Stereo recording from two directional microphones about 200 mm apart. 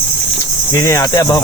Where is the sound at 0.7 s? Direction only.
15° left (ahead or behind).